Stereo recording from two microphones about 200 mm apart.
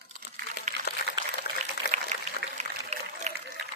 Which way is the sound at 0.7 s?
35° right (ahead or behind).